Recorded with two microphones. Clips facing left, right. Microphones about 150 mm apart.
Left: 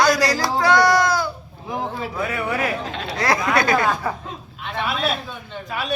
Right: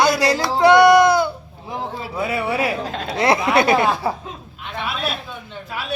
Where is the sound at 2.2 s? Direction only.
10° right (ahead or behind).